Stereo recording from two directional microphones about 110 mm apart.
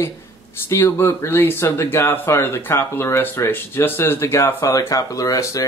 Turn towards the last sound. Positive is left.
turn(degrees=30)  # may be behind; listen again after turning